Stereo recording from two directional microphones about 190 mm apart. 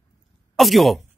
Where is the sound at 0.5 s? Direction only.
Centre (ahead or behind).